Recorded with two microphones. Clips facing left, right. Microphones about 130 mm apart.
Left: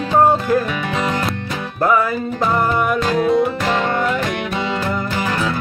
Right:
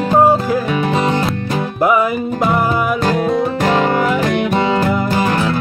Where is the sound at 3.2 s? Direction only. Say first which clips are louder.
Right 1 dB; 50° right (ahead or behind).